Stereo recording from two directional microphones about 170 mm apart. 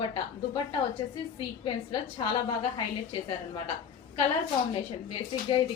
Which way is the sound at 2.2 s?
30° left (ahead or behind).